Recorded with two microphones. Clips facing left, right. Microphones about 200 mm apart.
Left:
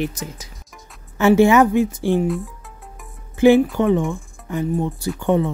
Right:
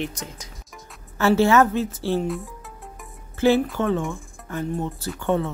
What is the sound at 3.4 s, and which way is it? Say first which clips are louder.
Speech: left 6 dB; 15° left (ahead or behind).